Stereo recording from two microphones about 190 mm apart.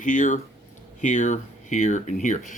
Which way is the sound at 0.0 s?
40° left (ahead or behind).